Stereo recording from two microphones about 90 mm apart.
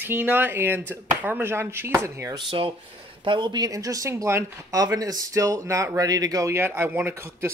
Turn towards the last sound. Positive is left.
turn(degrees=-30)  # may be behind; listen again after turning